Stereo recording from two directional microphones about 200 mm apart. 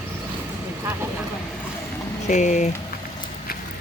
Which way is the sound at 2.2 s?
40° left (ahead or behind).